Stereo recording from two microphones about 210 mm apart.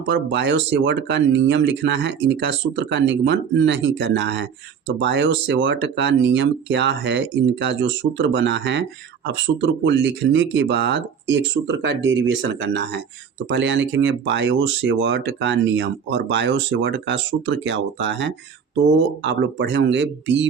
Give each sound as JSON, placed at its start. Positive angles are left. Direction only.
{"t": 0.0, "sound": "speech", "side_deg": -60}